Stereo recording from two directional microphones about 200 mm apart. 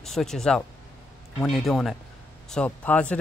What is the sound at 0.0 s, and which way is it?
A man's voice, centre (ahead or behind).